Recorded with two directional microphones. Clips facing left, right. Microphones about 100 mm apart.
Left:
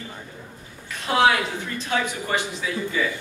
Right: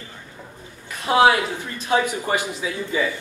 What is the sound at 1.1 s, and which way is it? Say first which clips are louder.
A woman's voice: right 3 dB; 15° right (ahead or behind).